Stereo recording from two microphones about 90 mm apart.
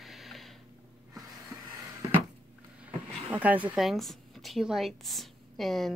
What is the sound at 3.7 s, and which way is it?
A woman's voice, centre (ahead or behind).